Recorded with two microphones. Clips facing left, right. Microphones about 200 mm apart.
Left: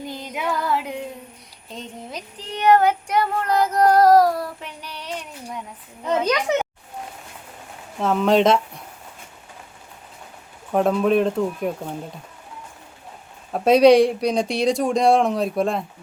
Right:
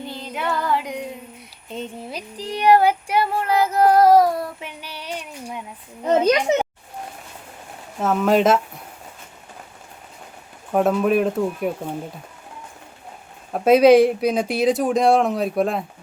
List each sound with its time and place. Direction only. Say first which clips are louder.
0.2 s female singing: right 1 dB; 10° left (ahead or behind)
2.0 s child singing: right 4 dB; 10° right (ahead or behind)
5.0 s a sound: right 1 dB; 10° right (ahead or behind)
6.1 s a child's voice: right 3 dB; 25° right (ahead or behind)
7.9 s speech: even; 5° right (ahead or behind)
10.7 s speech: even; 5° right (ahead or behind)
13.5 s speech: right 1 dB; centre (ahead or behind)